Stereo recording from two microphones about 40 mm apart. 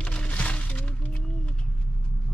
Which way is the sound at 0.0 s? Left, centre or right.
Left.